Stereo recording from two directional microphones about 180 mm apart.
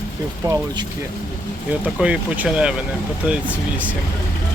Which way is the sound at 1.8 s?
5° right (ahead or behind).